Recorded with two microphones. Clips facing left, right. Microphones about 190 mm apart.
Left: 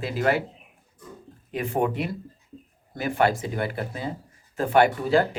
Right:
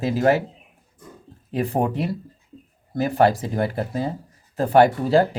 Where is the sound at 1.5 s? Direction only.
35° right (ahead or behind).